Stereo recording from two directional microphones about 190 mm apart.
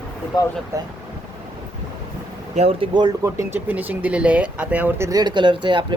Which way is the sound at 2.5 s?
30° right (ahead or behind).